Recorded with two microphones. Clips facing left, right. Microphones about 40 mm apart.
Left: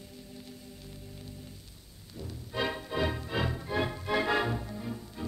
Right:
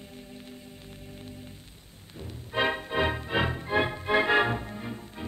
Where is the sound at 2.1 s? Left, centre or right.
Right.